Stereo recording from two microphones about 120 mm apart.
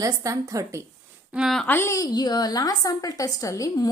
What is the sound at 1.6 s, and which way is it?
A woman's voice, 20° left (ahead or behind).